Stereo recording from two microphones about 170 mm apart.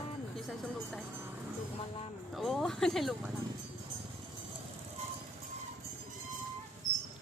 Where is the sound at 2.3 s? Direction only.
Centre (ahead or behind).